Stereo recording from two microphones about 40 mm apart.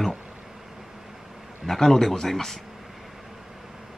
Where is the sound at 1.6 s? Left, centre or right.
Centre.